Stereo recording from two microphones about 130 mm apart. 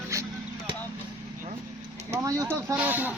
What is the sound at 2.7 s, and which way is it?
Speech, 15° right (ahead or behind).